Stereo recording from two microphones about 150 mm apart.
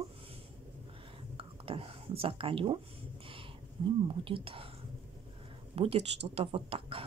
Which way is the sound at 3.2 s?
35° right (ahead or behind).